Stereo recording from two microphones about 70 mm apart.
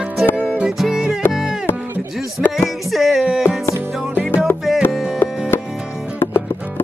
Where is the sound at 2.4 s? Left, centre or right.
Centre.